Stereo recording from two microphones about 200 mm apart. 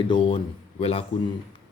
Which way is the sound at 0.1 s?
25° left (ahead or behind).